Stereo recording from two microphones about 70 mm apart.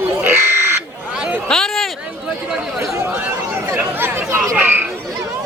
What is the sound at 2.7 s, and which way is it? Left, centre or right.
Speech, right.